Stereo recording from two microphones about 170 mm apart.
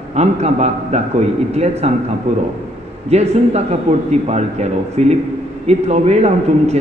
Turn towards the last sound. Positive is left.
turn(degrees=-40)  # may be behind; listen again after turning